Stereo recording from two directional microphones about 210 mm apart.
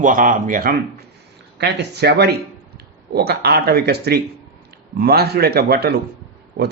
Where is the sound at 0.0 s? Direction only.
40° right (ahead or behind).